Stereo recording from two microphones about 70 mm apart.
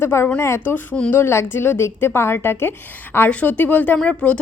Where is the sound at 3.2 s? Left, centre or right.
Left.